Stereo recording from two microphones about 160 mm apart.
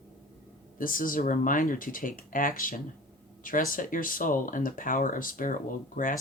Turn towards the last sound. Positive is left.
turn(degrees=55)  # may be behind; listen again after turning